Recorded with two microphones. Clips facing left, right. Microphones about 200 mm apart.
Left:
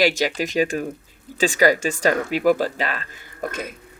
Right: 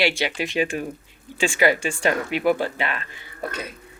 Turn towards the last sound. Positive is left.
turn(degrees=45)  # may be behind; listen again after turning